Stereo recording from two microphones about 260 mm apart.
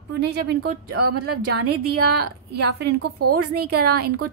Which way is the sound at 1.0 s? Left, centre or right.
Right.